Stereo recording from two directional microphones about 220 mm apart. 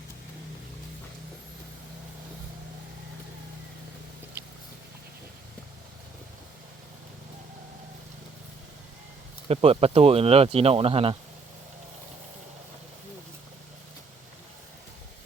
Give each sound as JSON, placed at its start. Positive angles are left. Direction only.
{"t": 9.5, "sound": "speech", "side_deg": -25}